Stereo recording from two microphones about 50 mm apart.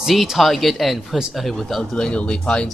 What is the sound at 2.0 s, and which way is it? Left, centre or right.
Speech, centre.